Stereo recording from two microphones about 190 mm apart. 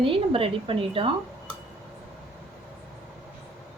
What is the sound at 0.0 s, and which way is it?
A woman's voice, 30° right (ahead or behind).